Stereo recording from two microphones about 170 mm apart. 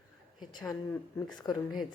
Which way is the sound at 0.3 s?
25° left (ahead or behind).